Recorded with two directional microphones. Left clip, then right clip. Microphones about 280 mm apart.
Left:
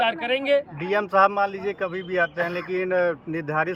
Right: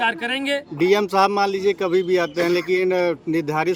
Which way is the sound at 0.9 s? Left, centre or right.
Right.